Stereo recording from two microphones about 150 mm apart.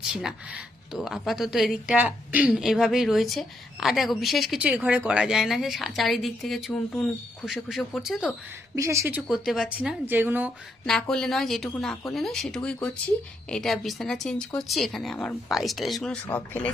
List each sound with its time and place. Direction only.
0.1 s speech: 5° right (ahead or behind)
8.7 s speech: 20° right (ahead or behind)
9.5 s a woman's voice: 5° right (ahead or behind)
11.1 s speech: 5° left (ahead or behind)